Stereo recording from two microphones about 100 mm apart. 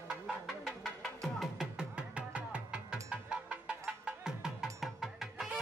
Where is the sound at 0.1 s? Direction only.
Centre (ahead or behind).